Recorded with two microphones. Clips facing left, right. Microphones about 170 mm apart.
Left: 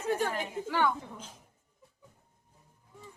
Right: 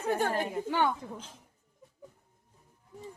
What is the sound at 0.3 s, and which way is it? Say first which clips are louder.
Speech: right 4 dB; 40° right (ahead or behind).